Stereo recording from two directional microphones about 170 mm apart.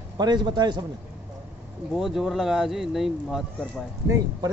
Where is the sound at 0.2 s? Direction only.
25° right (ahead or behind).